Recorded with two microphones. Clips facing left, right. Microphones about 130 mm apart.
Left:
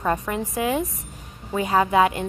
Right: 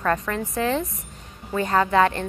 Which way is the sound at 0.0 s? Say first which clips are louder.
Even; 15° left (ahead or behind).